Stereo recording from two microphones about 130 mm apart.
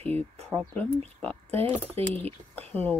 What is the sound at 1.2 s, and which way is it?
Speech, 10° left (ahead or behind).